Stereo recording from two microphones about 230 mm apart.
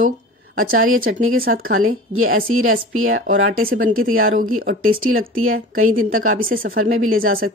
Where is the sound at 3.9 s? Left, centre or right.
Right.